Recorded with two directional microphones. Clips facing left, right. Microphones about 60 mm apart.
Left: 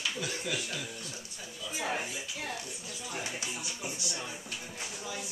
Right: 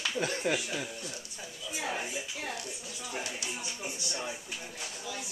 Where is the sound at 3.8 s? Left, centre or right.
Left.